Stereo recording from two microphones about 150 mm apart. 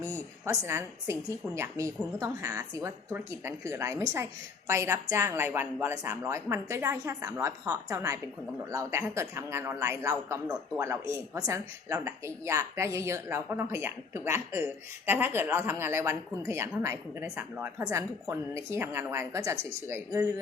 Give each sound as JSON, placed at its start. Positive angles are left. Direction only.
{"t": 0.0, "sound": "a woman's voice", "side_deg": -15}